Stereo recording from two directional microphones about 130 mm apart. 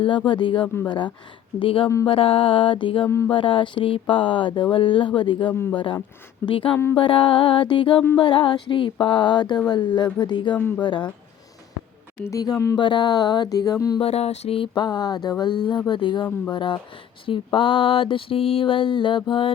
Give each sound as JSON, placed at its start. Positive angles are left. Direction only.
{"t": 0.3, "sound": "mantra", "side_deg": 40}
{"t": 3.1, "sound": "speech", "side_deg": 20}
{"t": 3.3, "sound": "mantra", "side_deg": 40}
{"t": 10.5, "sound": "speech", "side_deg": 10}
{"t": 10.8, "sound": "mantra", "side_deg": 35}
{"t": 12.2, "sound": "speech", "side_deg": 25}
{"t": 12.7, "sound": "mantra", "side_deg": 35}
{"t": 14.0, "sound": "mantra", "side_deg": 50}